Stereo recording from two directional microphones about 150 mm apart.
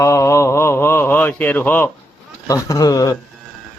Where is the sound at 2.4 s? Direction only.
20° left (ahead or behind).